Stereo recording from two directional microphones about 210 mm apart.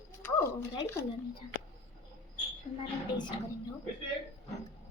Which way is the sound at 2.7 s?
30° left (ahead or behind).